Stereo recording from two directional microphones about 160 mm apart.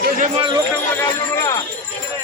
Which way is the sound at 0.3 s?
30° right (ahead or behind).